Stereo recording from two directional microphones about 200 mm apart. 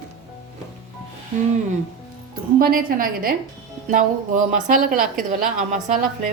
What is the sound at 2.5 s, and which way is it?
Speech, 45° right (ahead or behind).